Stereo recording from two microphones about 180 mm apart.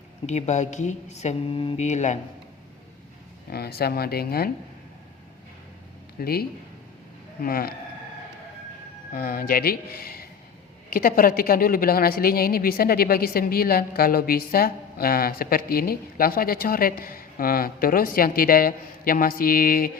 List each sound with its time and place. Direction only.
0.3 s speech: 40° left (ahead or behind)
3.5 s a woman's voice: 60° left (ahead or behind)
6.1 s a woman's voice: 60° left (ahead or behind)
7.4 s a woman's voice: 55° left (ahead or behind)
9.1 s a woman's voice: 55° left (ahead or behind)